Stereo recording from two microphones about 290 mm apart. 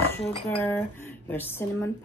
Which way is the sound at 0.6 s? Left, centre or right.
Centre.